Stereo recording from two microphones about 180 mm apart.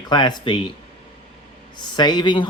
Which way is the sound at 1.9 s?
25° left (ahead or behind).